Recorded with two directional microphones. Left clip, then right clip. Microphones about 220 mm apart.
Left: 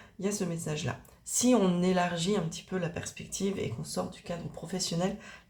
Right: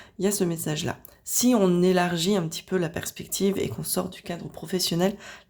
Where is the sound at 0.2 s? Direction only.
40° right (ahead or behind).